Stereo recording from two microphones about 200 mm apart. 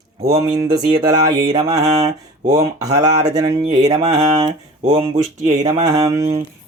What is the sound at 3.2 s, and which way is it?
Speech, 20° right (ahead or behind).